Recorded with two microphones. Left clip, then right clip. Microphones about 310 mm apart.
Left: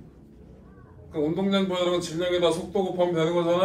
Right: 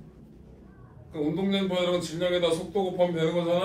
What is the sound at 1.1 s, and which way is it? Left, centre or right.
A man's voice, centre.